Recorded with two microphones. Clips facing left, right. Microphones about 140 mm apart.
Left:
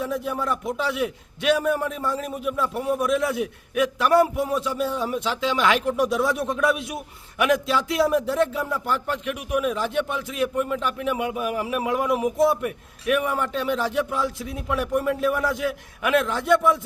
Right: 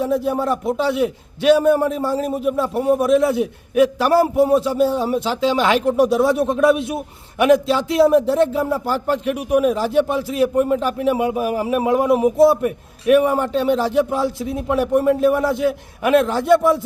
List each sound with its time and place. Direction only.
0.0 s a man's voice: 30° right (ahead or behind)